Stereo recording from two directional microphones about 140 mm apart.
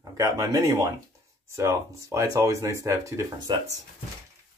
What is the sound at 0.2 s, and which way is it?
Speech, 25° right (ahead or behind).